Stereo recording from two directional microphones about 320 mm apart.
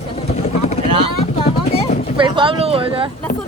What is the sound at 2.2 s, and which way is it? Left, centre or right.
Speech, centre.